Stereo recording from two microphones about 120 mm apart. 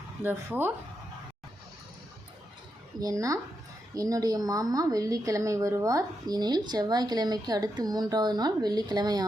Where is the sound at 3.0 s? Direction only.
30° right (ahead or behind).